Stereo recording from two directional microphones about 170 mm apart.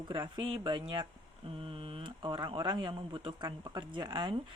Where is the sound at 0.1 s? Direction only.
30° right (ahead or behind).